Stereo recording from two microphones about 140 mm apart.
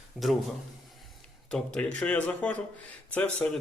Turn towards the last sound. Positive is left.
turn(degrees=10)  # may be behind; listen again after turning